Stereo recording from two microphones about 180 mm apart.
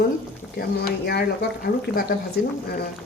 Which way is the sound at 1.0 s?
60° left (ahead or behind).